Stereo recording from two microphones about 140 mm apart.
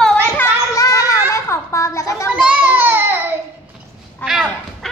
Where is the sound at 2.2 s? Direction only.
5° right (ahead or behind).